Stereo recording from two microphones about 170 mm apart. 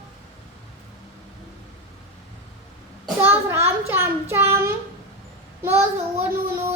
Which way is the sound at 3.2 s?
15° right (ahead or behind).